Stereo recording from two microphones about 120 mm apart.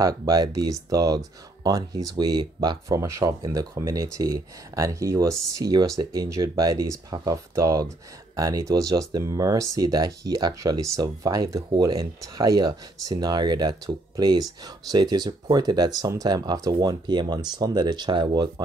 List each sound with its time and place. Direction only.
0.0 s speech: 30° right (ahead or behind)